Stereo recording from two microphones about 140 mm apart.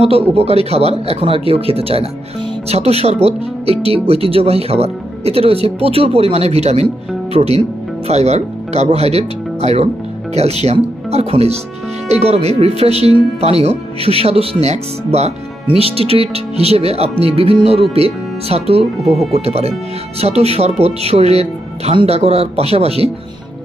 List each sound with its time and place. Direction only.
0.0 s speech: 45° right (ahead or behind)